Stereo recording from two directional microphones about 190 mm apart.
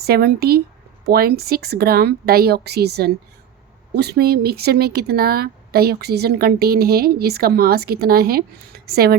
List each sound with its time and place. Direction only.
0.0 s speech: 55° right (ahead or behind)